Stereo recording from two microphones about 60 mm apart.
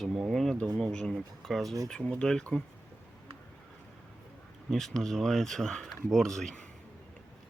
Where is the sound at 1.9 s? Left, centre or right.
Centre.